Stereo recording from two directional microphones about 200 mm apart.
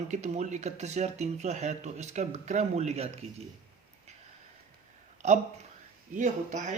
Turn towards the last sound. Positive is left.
turn(degrees=-35)  # may be behind; listen again after turning